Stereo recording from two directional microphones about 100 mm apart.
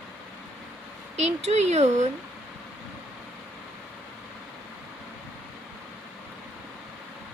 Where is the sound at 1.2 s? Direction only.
90° right.